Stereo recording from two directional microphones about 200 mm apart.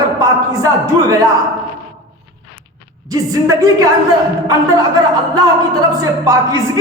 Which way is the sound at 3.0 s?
15° right (ahead or behind).